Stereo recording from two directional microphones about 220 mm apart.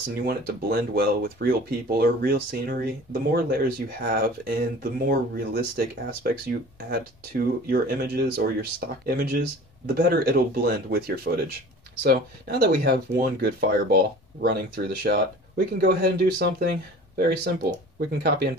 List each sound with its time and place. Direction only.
0.2 s speech: 40° right (ahead or behind)
17.9 s speech: 45° right (ahead or behind)